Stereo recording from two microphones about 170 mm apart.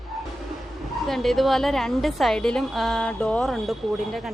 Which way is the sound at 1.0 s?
Centre (ahead or behind).